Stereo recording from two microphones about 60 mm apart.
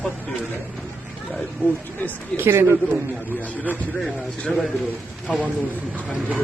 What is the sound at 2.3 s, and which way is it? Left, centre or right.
Speech, right.